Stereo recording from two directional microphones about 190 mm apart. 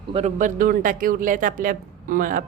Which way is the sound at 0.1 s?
35° right (ahead or behind).